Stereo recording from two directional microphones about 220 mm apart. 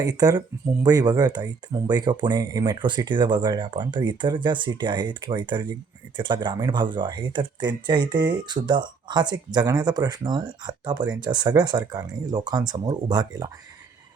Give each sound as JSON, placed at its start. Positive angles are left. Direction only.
{"t": 0.0, "sound": "speech", "side_deg": -15}